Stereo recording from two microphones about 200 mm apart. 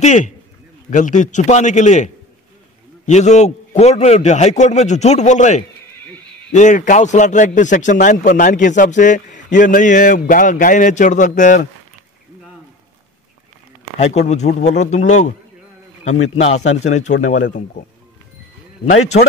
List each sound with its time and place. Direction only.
0.0 s a man's voice: 35° left (ahead or behind)
3.1 s a man's voice: 35° left (ahead or behind)
13.9 s a man's voice: 35° left (ahead or behind)
16.2 s a man's voice: 80° left
16.8 s a man's voice: 35° left (ahead or behind)